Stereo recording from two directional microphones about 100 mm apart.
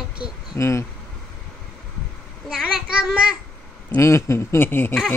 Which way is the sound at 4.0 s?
30° left (ahead or behind).